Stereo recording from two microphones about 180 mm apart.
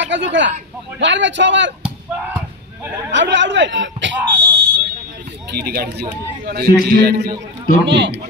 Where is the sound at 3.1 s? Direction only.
85° right.